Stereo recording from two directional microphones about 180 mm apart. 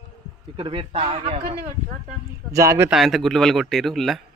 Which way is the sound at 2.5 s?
15° right (ahead or behind).